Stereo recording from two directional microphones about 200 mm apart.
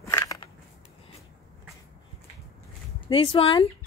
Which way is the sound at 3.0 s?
25° left (ahead or behind).